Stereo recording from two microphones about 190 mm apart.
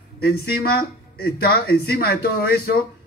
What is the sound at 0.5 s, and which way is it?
Speech, 55° left (ahead or behind).